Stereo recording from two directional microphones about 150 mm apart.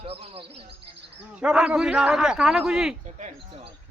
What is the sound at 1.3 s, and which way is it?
A man's voice, 5° right (ahead or behind).